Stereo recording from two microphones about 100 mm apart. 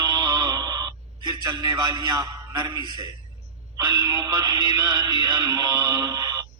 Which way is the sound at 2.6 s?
45° right (ahead or behind).